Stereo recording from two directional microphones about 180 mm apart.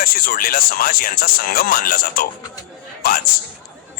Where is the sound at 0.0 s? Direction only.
55° left (ahead or behind).